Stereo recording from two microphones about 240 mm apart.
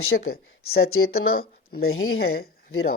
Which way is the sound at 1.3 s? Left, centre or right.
Left.